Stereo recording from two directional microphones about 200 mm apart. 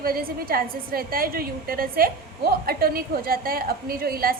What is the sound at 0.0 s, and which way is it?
A woman's voice, 50° right (ahead or behind).